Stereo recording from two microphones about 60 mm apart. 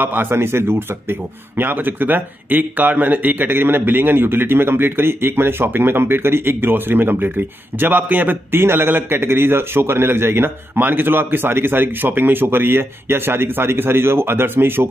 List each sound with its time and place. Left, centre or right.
0.0 s speech: right